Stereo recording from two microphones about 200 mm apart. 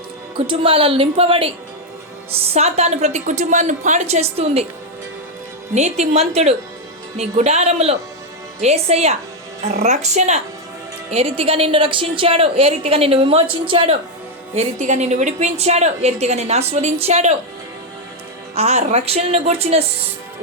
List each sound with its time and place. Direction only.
0.3 s a woman's voice: 25° right (ahead or behind)
5.7 s a woman's voice: 35° right (ahead or behind)
18.5 s a woman's voice: 30° right (ahead or behind)